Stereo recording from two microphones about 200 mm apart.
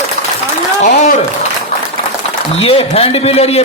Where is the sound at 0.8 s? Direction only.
35° left (ahead or behind).